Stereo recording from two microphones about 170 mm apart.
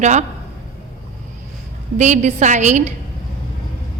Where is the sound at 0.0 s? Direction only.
45° right (ahead or behind).